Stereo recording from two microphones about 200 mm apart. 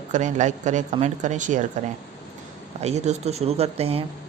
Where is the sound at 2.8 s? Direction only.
30° right (ahead or behind).